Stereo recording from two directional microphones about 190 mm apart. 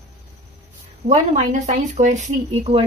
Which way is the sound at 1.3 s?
40° right (ahead or behind).